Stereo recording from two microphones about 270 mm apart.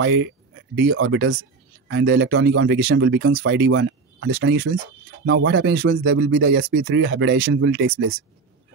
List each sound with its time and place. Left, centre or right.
0.0 s speech: right